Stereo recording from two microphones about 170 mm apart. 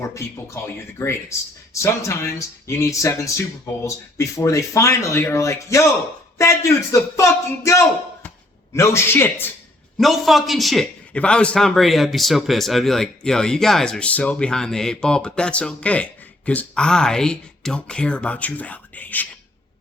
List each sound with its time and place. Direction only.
0.0 s speech: 20° left (ahead or behind)
10.0 s a man's voice: centre (ahead or behind)